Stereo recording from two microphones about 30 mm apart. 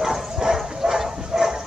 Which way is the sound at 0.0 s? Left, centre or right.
Centre.